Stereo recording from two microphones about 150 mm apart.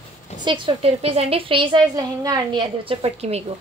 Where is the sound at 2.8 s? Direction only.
45° right (ahead or behind).